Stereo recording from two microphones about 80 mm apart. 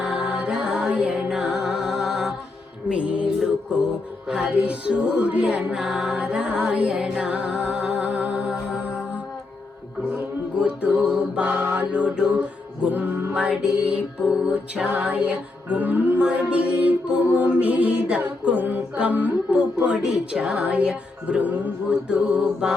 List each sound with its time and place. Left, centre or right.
0.0 s music: centre
4.5 s music: centre
10.6 s mantra: centre
13.3 s music: centre